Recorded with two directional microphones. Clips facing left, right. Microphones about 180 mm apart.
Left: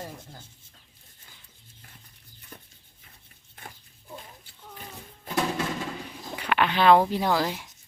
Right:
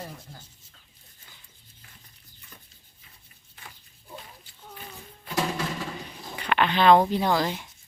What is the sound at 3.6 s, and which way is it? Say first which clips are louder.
Dog: left 4 dB; 50° left (ahead or behind).